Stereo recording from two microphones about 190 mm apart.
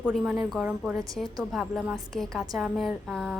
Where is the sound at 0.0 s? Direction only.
5° right (ahead or behind).